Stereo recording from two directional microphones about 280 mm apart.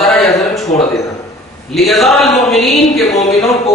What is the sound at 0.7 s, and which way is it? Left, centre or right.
Speech, left.